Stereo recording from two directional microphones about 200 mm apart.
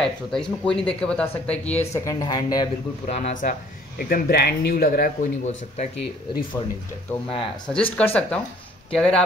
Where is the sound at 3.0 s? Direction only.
35° left (ahead or behind).